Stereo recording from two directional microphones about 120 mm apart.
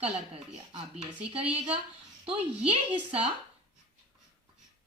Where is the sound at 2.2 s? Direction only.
50° right (ahead or behind).